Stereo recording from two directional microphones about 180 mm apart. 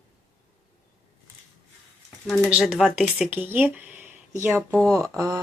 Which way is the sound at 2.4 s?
5° right (ahead or behind).